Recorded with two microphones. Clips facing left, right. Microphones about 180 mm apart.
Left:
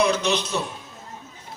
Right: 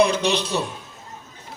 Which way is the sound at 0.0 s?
35° right (ahead or behind).